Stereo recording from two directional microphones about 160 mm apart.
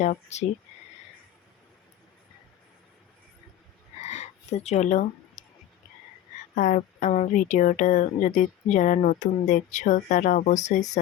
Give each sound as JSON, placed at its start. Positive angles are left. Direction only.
{"t": 0.0, "sound": "speech", "side_deg": 45}
{"t": 4.0, "sound": "a sound", "side_deg": 45}
{"t": 6.6, "sound": "speech", "side_deg": 55}